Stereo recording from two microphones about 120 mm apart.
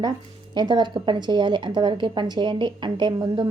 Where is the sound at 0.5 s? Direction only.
40° right (ahead or behind).